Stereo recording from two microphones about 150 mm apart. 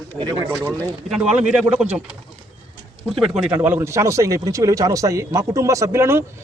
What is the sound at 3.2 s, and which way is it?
Speech, 5° right (ahead or behind).